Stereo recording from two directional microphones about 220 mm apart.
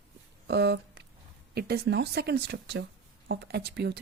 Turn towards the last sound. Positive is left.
turn(degrees=-50)  # may be behind; listen again after turning